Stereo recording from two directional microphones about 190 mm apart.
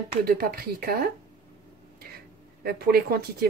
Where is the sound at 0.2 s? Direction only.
55° right (ahead or behind).